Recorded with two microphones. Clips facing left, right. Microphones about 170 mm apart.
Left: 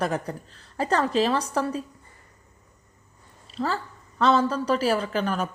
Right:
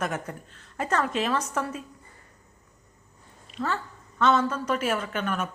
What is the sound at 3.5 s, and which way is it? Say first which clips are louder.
A woman's voice: left 2 dB; 35° left (ahead or behind).